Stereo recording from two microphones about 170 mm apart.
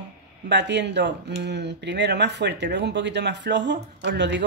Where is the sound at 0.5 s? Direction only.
90° right.